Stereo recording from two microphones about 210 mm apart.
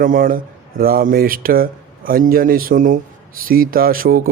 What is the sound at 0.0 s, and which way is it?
Speech, 40° right (ahead or behind).